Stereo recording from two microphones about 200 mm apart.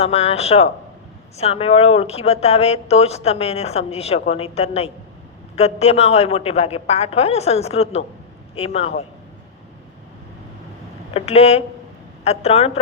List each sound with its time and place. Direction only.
0.0 s a man's voice: 30° left (ahead or behind)
11.1 s speech: 30° left (ahead or behind)